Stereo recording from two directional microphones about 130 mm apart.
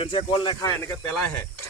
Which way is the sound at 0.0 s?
45° left (ahead or behind).